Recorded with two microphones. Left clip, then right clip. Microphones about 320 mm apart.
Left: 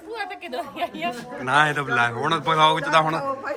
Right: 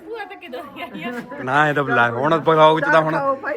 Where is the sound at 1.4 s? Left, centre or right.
Centre.